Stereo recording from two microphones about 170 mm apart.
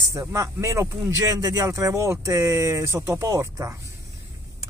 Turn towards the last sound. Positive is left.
turn(degrees=-20)  # may be behind; listen again after turning